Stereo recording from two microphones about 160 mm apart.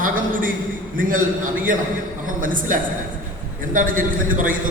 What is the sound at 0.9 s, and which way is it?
Speech, 60° right (ahead or behind).